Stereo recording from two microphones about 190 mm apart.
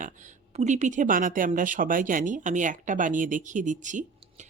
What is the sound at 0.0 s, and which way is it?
Speech, 40° right (ahead or behind).